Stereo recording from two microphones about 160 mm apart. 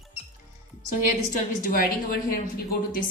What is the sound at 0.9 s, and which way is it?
A woman's voice, 60° left (ahead or behind).